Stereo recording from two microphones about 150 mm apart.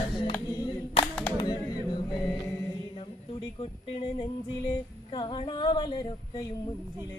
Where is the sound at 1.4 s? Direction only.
30° left (ahead or behind).